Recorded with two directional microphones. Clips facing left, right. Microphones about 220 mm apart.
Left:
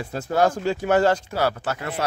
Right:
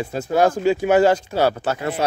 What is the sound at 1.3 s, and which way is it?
Speech, 25° right (ahead or behind).